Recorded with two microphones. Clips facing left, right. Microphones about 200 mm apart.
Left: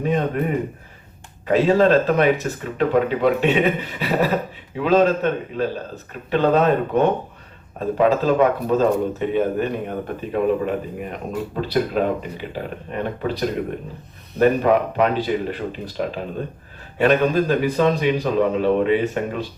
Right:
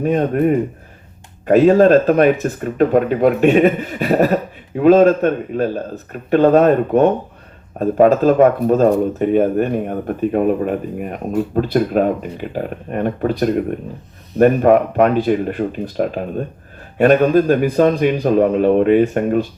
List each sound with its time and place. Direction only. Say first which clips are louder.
0.0 s speech: right 6 dB; 50° right (ahead or behind)